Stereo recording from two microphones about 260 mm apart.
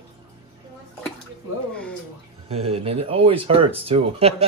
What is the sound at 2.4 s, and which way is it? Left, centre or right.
Speech, right.